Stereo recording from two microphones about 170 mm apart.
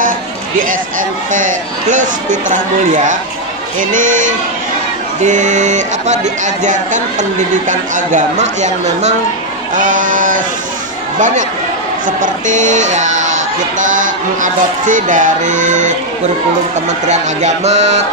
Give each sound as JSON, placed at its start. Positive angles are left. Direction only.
{"t": 0.7, "sound": "speech", "side_deg": -50}
{"t": 17.1, "sound": "speech", "side_deg": -40}